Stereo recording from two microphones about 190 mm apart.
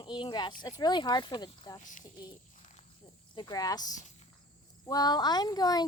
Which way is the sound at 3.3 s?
20° left (ahead or behind).